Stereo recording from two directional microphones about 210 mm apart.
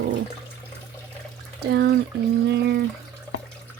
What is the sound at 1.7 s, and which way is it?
Speech, 50° right (ahead or behind).